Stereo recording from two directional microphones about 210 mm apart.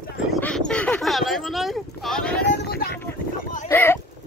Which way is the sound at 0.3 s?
5° left (ahead or behind).